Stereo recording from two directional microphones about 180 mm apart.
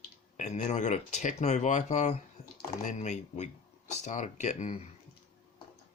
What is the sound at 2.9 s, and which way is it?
Speech, 40° left (ahead or behind).